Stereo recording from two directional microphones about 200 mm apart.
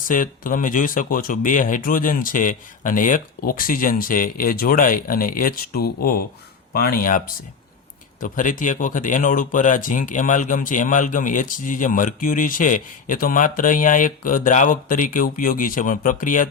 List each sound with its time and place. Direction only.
0.1 s speech: 40° left (ahead or behind)